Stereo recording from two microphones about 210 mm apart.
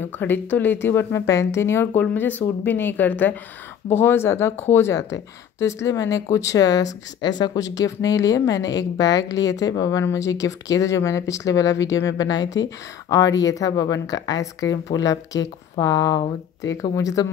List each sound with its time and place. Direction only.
0.2 s speech: 10° left (ahead or behind)